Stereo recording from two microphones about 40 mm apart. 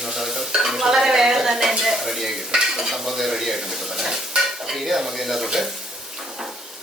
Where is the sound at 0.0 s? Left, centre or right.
Centre.